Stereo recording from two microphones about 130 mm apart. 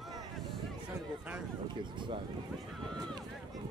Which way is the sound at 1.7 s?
35° right (ahead or behind).